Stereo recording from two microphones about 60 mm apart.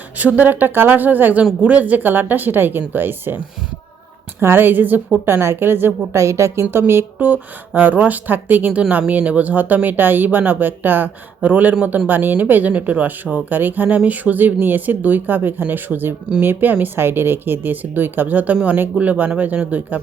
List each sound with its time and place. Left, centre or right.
0.2 s speech: right
6.1 s a woman's voice: right
7.2 s speech: right
12.0 s speech: right